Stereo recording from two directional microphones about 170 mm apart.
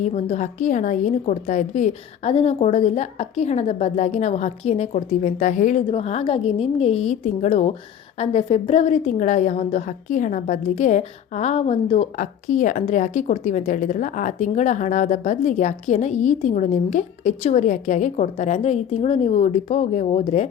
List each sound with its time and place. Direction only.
0.0 s a woman's voice: 40° left (ahead or behind)